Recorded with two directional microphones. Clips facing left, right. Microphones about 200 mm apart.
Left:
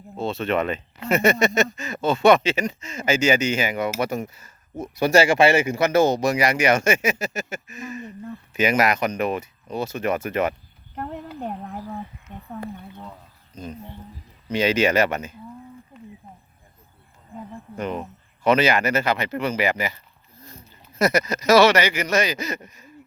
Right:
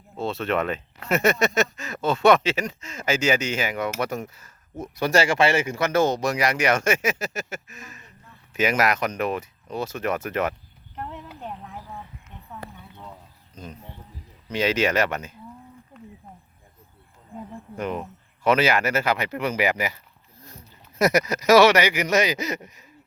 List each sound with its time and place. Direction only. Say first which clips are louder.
0.2 s speech: left 2 dB; centre (ahead or behind)
8.0 s speech: left 18 dB; 60° left (ahead or behind)
8.5 s speech: left 2 dB; centre (ahead or behind)
10.9 s a sound: left 5 dB; 45° left (ahead or behind)
14.5 s speech: left 3 dB; centre (ahead or behind)
17.5 s cricket: left 1 dB; 5° right (ahead or behind)
18.0 s speech: left 1 dB; 5° right (ahead or behind)
21.0 s speech: even; 15° right (ahead or behind)